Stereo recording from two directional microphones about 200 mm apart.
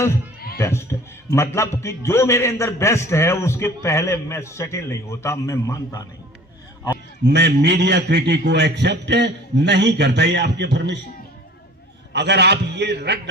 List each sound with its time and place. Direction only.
0.6 s a man's voice: 15° left (ahead or behind)
7.3 s a man's voice: 60° right (ahead or behind)
12.1 s a man's voice: 55° right (ahead or behind)